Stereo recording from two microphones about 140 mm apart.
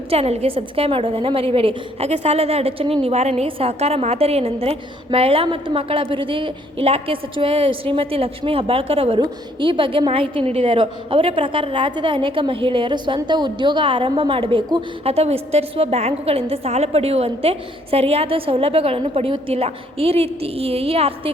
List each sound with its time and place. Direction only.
0.1 s a woman's voice: 50° right (ahead or behind)